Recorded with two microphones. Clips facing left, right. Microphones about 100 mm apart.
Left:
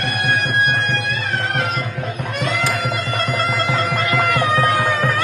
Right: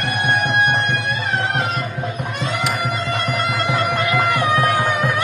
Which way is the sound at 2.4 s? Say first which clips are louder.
Left 1 dB; 15° right (ahead or behind).